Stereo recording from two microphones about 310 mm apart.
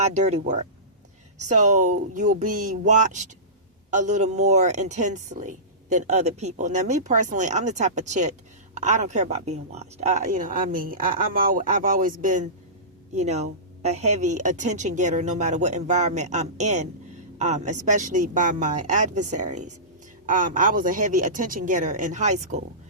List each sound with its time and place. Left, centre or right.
0.0 s a woman's voice: right